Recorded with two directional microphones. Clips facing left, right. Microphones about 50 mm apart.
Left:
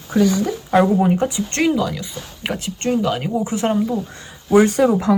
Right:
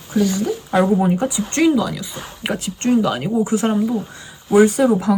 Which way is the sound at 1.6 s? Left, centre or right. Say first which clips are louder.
Right 3 dB; centre.